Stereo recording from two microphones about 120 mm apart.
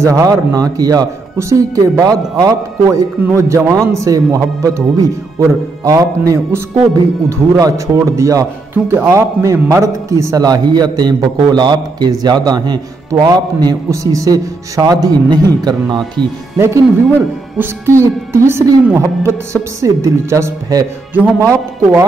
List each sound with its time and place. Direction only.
0.0 s a woman's voice: 25° right (ahead or behind)
5.9 s a woman's voice: 30° right (ahead or behind)
16.5 s a woman's voice: 20° right (ahead or behind)